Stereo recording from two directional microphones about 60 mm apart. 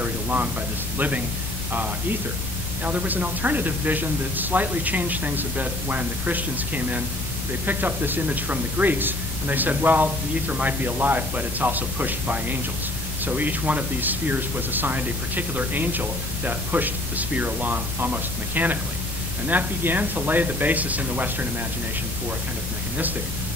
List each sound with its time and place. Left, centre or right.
0.0 s a sound: right
0.9 s speech: right
2.8 s speech: right